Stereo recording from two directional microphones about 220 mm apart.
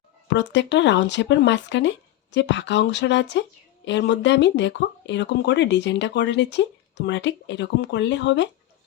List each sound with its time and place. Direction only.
0.3 s speech: 55° left (ahead or behind)